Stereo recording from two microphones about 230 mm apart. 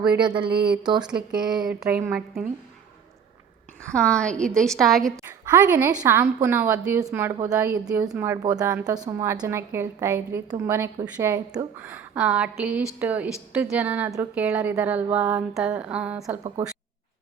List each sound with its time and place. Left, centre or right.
0.2 s speech: centre
0.5 s speech: right
1.4 s a woman's voice: centre
3.8 s a woman's voice: centre
5.1 s a woman's voice: centre